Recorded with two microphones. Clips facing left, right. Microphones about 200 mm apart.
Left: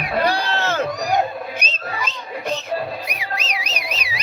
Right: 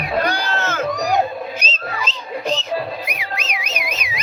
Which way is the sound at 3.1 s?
40° left (ahead or behind).